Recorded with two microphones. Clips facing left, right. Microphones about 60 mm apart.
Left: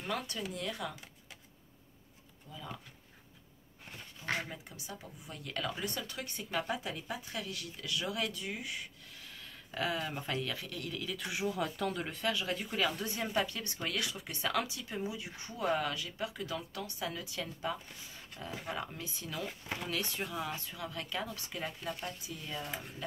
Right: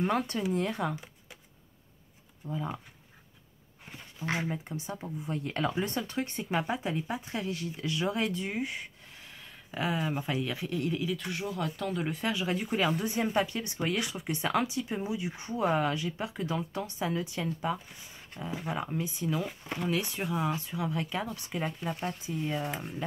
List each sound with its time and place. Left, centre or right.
0.0 s speech: right
2.5 s speech: right
4.5 s speech: right
9.7 s speech: centre
11.1 s speech: centre
12.1 s speech: right
19.4 s speech: centre
19.9 s speech: centre